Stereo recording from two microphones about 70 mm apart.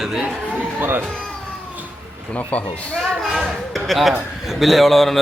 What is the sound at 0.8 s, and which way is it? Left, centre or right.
Speech, right.